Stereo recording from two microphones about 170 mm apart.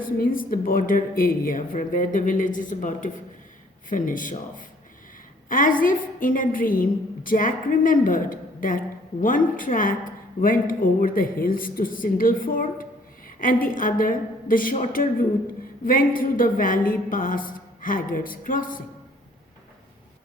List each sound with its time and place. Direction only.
0.0 s a woman's voice: 55° left (ahead or behind)